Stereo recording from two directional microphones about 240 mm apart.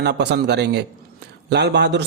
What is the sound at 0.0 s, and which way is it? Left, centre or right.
A man's voice, right.